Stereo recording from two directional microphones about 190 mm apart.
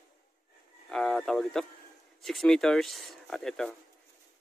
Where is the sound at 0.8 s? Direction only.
Centre (ahead or behind).